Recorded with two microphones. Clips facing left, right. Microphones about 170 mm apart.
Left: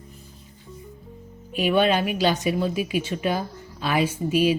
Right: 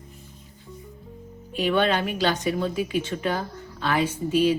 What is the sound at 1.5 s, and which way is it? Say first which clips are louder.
Speech: left 2 dB; 10° left (ahead or behind).